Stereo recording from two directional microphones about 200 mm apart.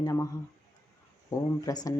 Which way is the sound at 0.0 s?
15° left (ahead or behind).